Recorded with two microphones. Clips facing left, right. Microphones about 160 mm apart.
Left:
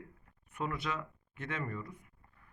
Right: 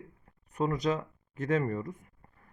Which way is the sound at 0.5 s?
40° right (ahead or behind).